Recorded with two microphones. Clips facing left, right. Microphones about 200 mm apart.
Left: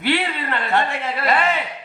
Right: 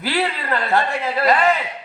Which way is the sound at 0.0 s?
35° right (ahead or behind).